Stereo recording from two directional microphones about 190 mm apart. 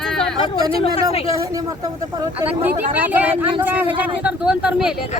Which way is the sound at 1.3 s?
15° right (ahead or behind).